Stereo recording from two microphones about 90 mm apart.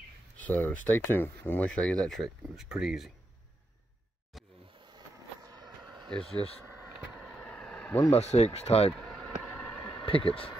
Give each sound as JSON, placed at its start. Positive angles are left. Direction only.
{"t": 0.4, "sound": "speech", "side_deg": 20}
{"t": 1.7, "sound": "speech", "side_deg": 10}
{"t": 4.8, "sound": "vehicle", "side_deg": -45}
{"t": 7.2, "sound": "vehicle", "side_deg": 10}
{"t": 8.1, "sound": "speech", "side_deg": 90}
{"t": 8.9, "sound": "a sound", "side_deg": 5}
{"t": 10.0, "sound": "speech", "side_deg": 85}